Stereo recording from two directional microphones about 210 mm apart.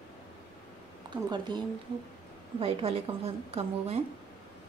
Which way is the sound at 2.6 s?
25° right (ahead or behind).